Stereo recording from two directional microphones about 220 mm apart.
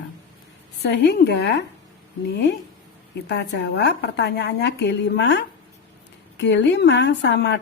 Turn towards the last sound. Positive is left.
turn(degrees=50)  # may be behind; listen again after turning